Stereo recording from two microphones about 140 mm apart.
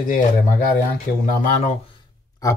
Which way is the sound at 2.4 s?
25° left (ahead or behind).